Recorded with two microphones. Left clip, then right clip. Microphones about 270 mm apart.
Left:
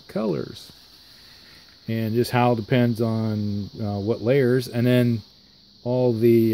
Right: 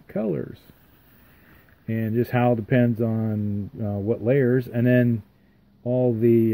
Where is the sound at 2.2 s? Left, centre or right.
Left.